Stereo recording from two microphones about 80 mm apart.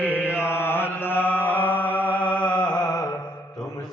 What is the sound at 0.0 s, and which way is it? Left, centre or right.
Mantra, left.